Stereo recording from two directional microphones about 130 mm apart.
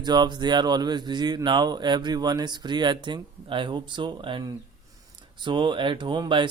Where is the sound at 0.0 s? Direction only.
35° right (ahead or behind).